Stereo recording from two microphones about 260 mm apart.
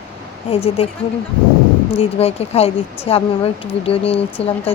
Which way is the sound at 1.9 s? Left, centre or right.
Left.